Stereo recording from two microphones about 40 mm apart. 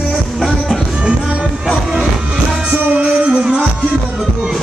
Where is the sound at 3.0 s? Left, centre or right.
Right.